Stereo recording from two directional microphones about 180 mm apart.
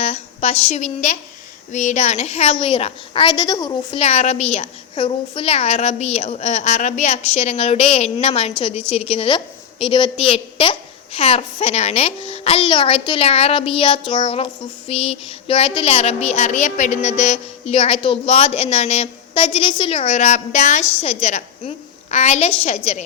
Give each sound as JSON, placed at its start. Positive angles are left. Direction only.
{"t": 0.0, "sound": "a woman's voice", "side_deg": 35}
{"t": 3.9, "sound": "a woman's voice", "side_deg": 35}